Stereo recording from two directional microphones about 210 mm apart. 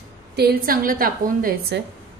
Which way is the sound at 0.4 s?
45° right (ahead or behind).